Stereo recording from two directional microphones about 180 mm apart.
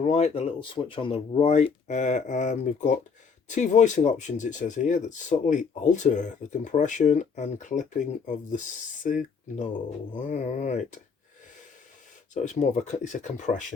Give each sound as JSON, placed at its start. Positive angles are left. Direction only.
{"t": 0.0, "sound": "speech", "side_deg": 35}
{"t": 12.3, "sound": "speech", "side_deg": 40}